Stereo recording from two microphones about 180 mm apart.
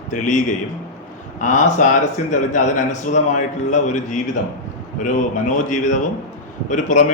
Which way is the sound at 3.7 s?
40° left (ahead or behind).